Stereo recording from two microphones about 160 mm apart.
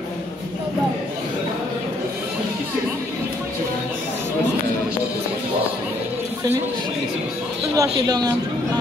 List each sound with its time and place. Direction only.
7.7 s speech: 25° right (ahead or behind)